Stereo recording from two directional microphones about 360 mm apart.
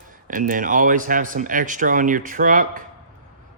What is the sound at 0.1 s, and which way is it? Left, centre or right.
Speech, right.